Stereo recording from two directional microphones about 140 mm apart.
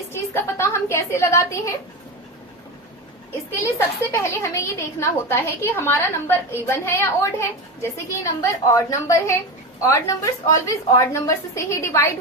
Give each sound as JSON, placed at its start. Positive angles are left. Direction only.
{"t": 0.1, "sound": "a woman's voice", "side_deg": 20}
{"t": 3.8, "sound": "a woman's voice", "side_deg": 20}